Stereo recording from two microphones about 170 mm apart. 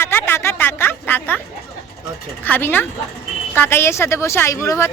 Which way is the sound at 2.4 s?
10° left (ahead or behind).